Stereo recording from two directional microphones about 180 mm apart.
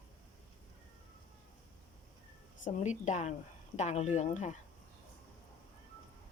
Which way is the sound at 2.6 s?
40° left (ahead or behind).